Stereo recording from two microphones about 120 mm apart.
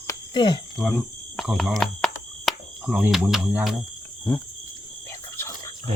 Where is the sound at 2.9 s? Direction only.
5° right (ahead or behind).